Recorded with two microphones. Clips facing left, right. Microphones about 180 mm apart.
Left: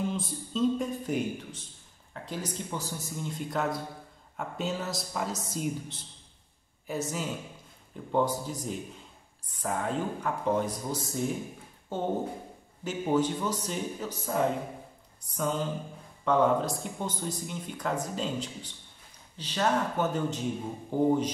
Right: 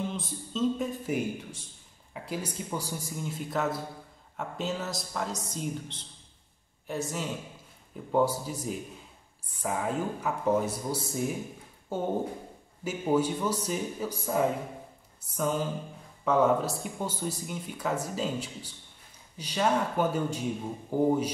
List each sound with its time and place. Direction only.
0.1 s speech: centre (ahead or behind)
15.1 s a sound: 5° right (ahead or behind)
16.3 s speech: 5° right (ahead or behind)